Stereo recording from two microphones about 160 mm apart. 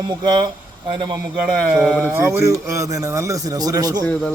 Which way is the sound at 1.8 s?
Centre (ahead or behind).